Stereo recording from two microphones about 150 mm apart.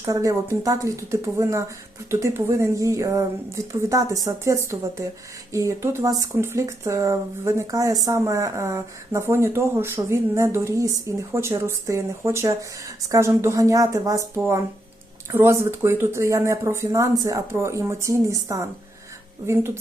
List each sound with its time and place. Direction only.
0.0 s speech: 20° right (ahead or behind)